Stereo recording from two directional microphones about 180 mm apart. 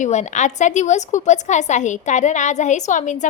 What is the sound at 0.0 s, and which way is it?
A woman's voice, 40° left (ahead or behind).